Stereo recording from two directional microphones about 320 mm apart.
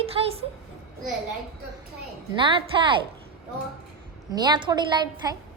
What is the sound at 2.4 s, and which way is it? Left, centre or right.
Speech, centre.